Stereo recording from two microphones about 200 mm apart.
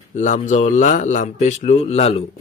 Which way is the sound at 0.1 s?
35° left (ahead or behind).